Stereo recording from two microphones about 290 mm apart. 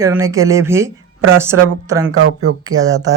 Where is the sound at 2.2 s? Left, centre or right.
Right.